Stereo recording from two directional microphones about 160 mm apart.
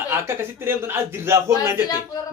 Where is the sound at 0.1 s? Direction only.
15° right (ahead or behind).